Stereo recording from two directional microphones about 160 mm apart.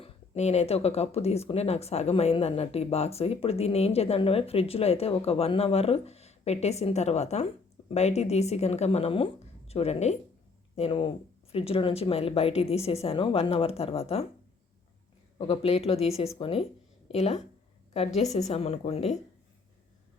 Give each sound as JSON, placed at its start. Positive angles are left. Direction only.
{"t": 0.0, "sound": "speech", "side_deg": 45}
{"t": 15.4, "sound": "speech", "side_deg": 40}